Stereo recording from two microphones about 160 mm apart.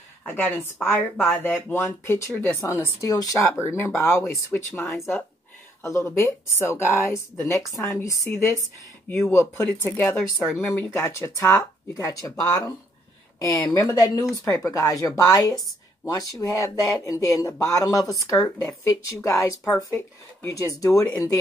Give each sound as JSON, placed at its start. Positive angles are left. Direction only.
{"t": 0.3, "sound": "speech", "side_deg": 15}
{"t": 10.3, "sound": "speech", "side_deg": -5}
{"t": 10.7, "sound": "speech", "side_deg": 15}
{"t": 13.7, "sound": "speech", "side_deg": 25}
{"t": 20.4, "sound": "speech", "side_deg": 20}